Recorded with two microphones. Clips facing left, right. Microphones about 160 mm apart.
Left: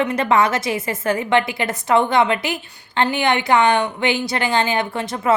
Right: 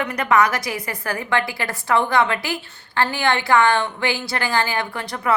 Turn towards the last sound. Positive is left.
turn(degrees=20)  # may be behind; listen again after turning